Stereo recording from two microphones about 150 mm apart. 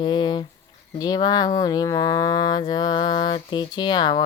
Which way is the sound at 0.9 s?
25° left (ahead or behind).